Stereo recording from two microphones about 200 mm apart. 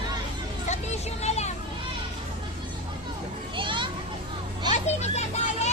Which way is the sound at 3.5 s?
25° right (ahead or behind).